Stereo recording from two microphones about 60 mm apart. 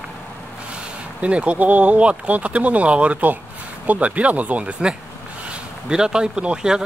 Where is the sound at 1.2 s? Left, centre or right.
Right.